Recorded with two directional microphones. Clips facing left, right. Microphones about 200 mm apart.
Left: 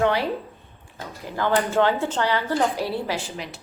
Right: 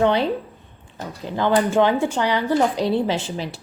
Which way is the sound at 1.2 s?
20° right (ahead or behind).